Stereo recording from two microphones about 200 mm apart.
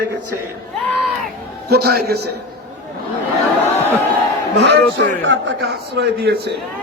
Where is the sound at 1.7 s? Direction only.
50° right (ahead or behind).